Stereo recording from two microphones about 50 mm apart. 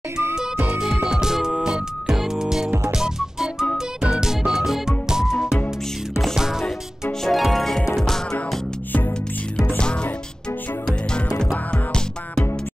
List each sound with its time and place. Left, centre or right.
1.0 s music: centre
6.6 s music: centre
10.9 s music: centre